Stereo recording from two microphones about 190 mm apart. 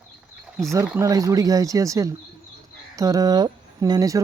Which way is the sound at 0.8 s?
15° right (ahead or behind).